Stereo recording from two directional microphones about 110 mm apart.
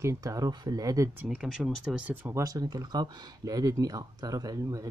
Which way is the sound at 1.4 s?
Centre (ahead or behind).